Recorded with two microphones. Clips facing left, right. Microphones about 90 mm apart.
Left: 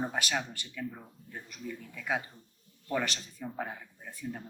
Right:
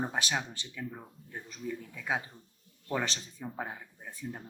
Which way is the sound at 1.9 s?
20° right (ahead or behind).